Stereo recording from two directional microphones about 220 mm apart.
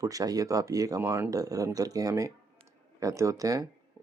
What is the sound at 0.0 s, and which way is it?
Speech, 15° right (ahead or behind).